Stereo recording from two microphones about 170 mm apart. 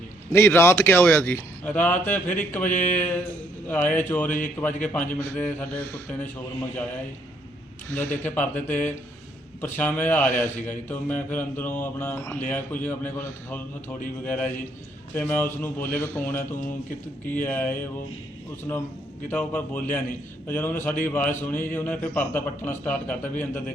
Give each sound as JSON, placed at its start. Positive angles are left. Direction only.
{"t": 0.3, "sound": "mantra", "side_deg": 15}
{"t": 2.2, "sound": "speech", "side_deg": 50}
{"t": 2.7, "sound": "mantra", "side_deg": 10}
{"t": 8.2, "sound": "mantra", "side_deg": 10}